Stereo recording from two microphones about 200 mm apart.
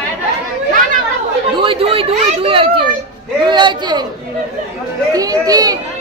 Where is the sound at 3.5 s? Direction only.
20° right (ahead or behind).